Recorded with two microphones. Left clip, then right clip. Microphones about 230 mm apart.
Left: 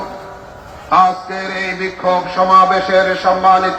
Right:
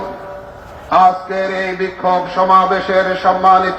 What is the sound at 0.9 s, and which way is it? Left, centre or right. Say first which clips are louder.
A man's voice: right 1 dB; right.